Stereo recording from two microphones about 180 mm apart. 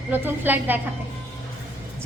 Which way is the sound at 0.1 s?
10° right (ahead or behind).